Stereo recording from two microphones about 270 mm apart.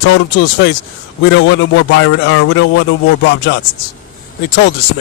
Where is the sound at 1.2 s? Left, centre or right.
Left.